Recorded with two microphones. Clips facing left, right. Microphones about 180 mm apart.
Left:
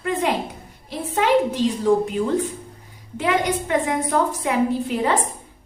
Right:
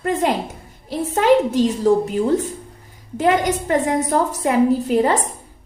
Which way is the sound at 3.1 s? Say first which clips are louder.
Right 4 dB; 40° right (ahead or behind).